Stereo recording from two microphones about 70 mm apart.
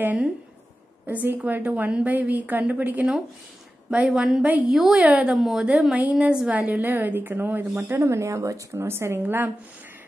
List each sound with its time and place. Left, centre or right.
0.0 s a woman's voice: right
4.1 s a woman's voice: centre
5.0 s speech: centre
5.4 s a woman's voice: centre; by 7.6 s right
8.1 s speech: right
8.8 s a woman's voice: right